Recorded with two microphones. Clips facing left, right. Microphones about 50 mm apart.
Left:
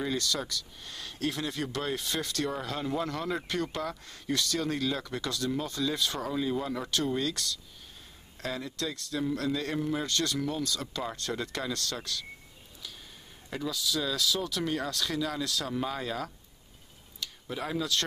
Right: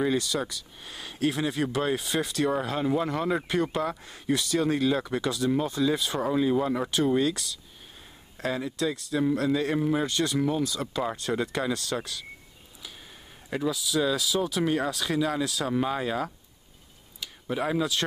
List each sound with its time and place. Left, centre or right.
0.0 s speech: centre
13.5 s speech: centre